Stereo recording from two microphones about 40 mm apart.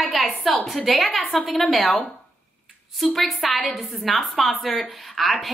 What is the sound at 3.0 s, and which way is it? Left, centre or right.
A woman's voice, centre.